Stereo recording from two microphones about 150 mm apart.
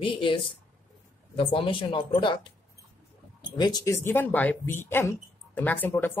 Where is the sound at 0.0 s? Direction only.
35° left (ahead or behind).